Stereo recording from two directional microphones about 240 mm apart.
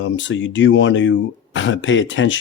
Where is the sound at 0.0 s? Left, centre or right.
Left.